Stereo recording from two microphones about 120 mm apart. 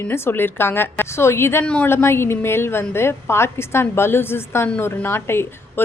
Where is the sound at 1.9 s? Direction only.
20° left (ahead or behind).